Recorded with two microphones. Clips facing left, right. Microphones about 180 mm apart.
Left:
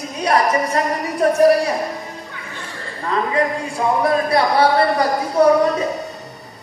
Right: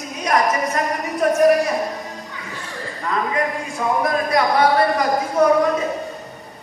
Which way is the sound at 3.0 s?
30° left (ahead or behind).